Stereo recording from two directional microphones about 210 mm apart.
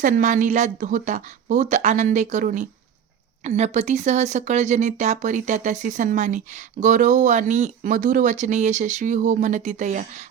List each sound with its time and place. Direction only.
0.0 s speech: 40° right (ahead or behind)